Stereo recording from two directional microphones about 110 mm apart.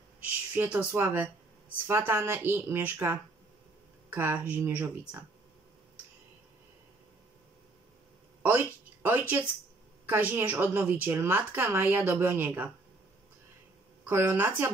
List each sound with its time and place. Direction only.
0.2 s a woman's voice: 15° right (ahead or behind)
8.4 s a sound: 20° right (ahead or behind)
10.3 s a woman's voice: 20° right (ahead or behind)
14.0 s a woman's voice: 20° right (ahead or behind)